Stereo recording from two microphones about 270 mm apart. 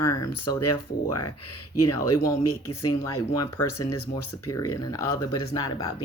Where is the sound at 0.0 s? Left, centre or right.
Centre.